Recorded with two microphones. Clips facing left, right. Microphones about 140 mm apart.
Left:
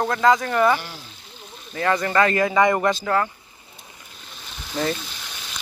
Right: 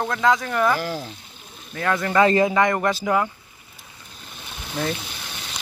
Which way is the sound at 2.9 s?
10° right (ahead or behind).